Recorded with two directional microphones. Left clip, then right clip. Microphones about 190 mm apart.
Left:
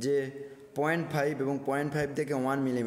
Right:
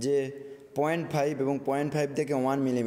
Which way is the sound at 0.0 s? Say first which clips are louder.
Right 2 dB; 20° right (ahead or behind).